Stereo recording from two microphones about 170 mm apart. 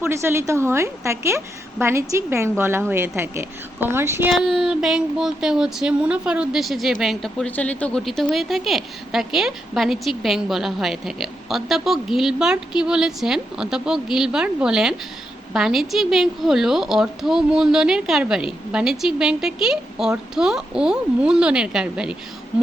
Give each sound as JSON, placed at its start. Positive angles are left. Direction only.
{"t": 0.0, "sound": "a woman's voice", "side_deg": -15}
{"t": 4.3, "sound": "a woman's voice", "side_deg": 0}